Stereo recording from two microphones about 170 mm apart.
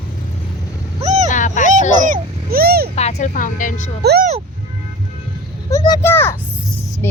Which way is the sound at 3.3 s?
50° left (ahead or behind).